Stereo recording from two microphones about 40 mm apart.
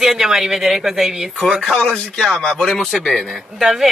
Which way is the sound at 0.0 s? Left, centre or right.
Centre.